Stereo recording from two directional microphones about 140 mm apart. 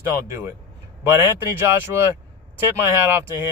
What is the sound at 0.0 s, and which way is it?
Speech, 20° right (ahead or behind).